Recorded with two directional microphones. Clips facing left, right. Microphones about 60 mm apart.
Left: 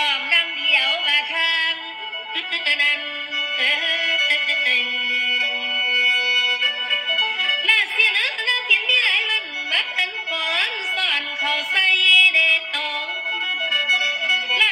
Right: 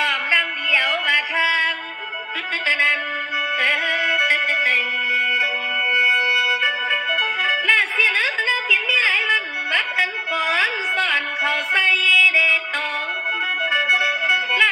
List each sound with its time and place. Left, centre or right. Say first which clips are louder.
0.0 s music: right 2 dB; right